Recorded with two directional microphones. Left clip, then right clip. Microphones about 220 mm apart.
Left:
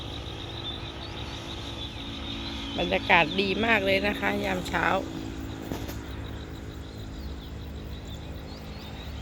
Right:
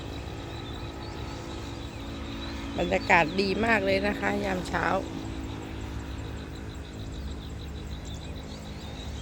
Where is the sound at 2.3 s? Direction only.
40° left (ahead or behind).